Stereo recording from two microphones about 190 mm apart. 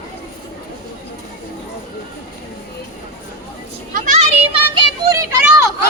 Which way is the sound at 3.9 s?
40° right (ahead or behind).